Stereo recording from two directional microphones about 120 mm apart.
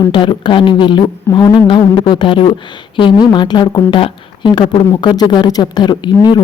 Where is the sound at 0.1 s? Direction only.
45° left (ahead or behind).